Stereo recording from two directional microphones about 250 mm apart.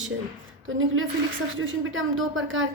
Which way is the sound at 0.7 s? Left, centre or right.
Right.